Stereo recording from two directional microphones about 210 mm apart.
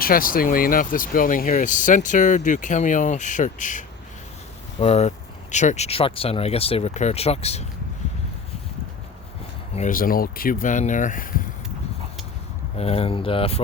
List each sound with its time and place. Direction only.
0.0 s speech: 45° left (ahead or behind)
9.7 s speech: 40° left (ahead or behind)
12.7 s speech: 30° left (ahead or behind)